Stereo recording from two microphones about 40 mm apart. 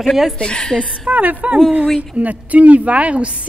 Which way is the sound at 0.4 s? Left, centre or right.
Left.